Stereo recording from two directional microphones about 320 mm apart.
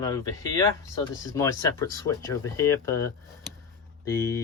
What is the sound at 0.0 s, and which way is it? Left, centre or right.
Speech, centre.